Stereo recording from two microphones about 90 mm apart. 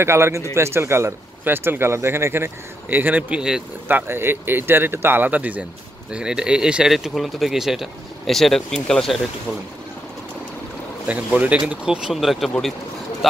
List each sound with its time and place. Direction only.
0.0 s speech: 30° right (ahead or behind); by 3.6 s 10° right (ahead or behind)
3.8 s speech: 25° right (ahead or behind); by 9.2 s 5° left (ahead or behind)
11.1 s speech: 15° right (ahead or behind)